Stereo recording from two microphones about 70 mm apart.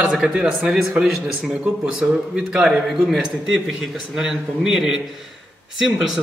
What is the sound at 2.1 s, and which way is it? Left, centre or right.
A man's voice, centre.